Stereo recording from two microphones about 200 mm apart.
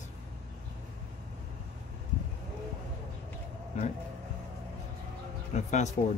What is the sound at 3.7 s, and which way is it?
Speech, 35° left (ahead or behind).